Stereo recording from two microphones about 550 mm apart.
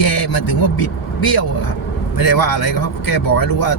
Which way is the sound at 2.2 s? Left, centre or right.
Left.